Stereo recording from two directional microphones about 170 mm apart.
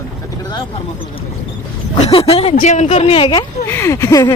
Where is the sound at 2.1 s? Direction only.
35° left (ahead or behind).